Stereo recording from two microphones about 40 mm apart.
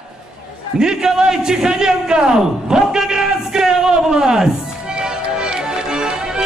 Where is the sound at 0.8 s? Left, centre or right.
Centre.